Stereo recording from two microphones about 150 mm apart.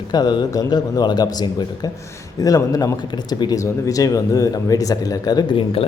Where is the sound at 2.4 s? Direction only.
25° left (ahead or behind).